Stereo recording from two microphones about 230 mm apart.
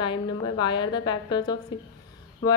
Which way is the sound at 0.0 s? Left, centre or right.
Centre.